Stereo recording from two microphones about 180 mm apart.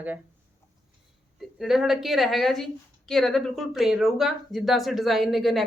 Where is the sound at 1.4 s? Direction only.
Centre (ahead or behind).